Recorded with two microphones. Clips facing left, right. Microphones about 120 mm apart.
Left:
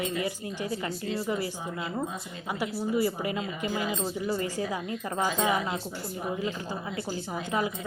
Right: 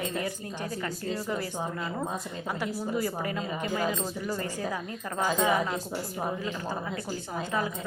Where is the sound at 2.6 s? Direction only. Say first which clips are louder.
Left 4 dB; 10° left (ahead or behind).